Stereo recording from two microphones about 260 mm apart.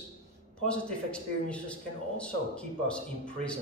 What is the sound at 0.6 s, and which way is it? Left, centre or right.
Speech, centre.